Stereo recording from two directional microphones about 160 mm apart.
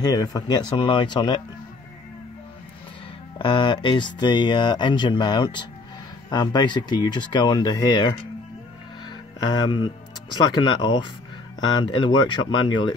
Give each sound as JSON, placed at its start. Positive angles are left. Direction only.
{"t": 0.0, "sound": "speech", "side_deg": 25}
{"t": 3.3, "sound": "speech", "side_deg": 30}
{"t": 9.4, "sound": "speech", "side_deg": 25}